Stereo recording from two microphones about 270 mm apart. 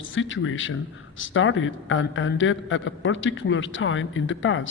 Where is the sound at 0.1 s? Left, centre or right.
Left.